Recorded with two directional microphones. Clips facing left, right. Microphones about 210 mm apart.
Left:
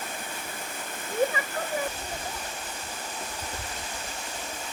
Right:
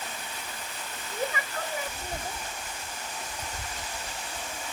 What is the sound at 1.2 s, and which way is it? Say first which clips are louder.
Waterfall: left 6 dB; 55° left (ahead or behind).